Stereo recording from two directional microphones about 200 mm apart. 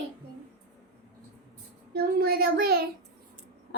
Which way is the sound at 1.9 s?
50° right (ahead or behind).